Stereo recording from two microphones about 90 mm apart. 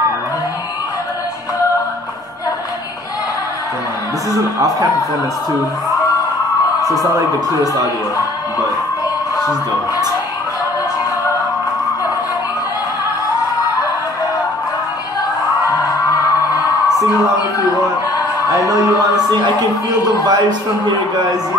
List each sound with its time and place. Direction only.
6.8 s speech: 40° right (ahead or behind)
20.2 s a man's voice: 50° right (ahead or behind)